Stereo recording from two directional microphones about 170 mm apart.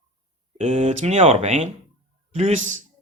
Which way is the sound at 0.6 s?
40° right (ahead or behind).